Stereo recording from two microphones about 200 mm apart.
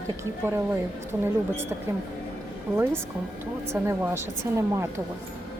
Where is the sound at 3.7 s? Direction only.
10° right (ahead or behind).